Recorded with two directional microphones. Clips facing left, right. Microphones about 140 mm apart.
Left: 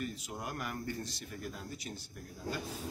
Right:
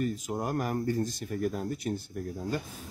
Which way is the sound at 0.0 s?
45° right (ahead or behind).